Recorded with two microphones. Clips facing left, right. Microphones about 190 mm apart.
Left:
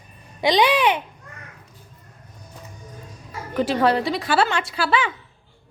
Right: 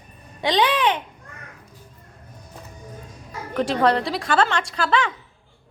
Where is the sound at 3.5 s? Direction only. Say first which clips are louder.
Even; 5° left (ahead or behind).